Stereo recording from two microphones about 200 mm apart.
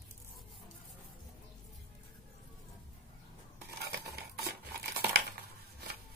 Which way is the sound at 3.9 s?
50° right (ahead or behind).